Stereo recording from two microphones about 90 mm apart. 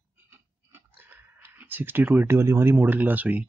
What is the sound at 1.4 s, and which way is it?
Speech, 20° right (ahead or behind).